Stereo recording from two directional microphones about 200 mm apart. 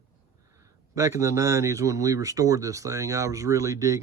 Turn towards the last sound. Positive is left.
turn(degrees=-15)  # may be behind; listen again after turning